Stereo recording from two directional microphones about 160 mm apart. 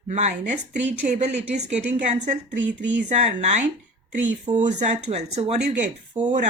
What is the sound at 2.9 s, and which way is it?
Speech, 45° right (ahead or behind).